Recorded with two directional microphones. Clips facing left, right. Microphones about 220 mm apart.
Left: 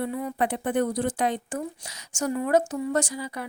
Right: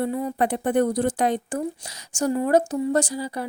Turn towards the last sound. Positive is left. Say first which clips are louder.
# right 4 dB
turn(degrees=-35)  # may be behind; listen again after turning